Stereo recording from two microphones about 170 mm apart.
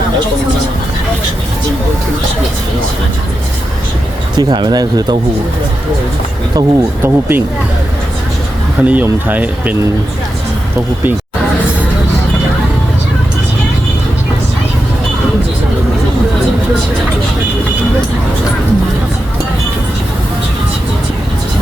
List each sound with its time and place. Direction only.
4.4 s speech: 25° right (ahead or behind)
6.6 s speech: 15° right (ahead or behind)
8.8 s speech: 10° right (ahead or behind)